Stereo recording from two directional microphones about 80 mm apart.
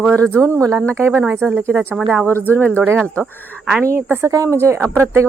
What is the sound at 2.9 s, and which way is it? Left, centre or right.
Speech, centre.